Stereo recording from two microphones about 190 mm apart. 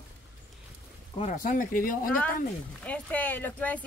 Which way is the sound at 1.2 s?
40° left (ahead or behind).